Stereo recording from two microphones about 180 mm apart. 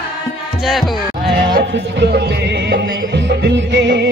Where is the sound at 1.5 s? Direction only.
70° right (ahead or behind).